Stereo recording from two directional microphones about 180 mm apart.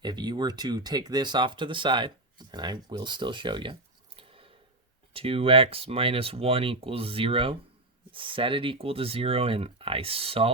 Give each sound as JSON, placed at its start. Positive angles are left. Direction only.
{"t": 0.0, "sound": "speech", "side_deg": -25}